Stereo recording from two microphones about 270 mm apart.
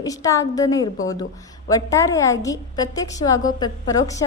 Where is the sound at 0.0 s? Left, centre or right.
Centre.